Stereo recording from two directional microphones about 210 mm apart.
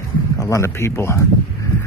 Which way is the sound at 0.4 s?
15° left (ahead or behind).